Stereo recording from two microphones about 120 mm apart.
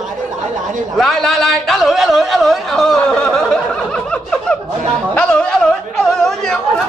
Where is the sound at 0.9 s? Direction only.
Centre (ahead or behind).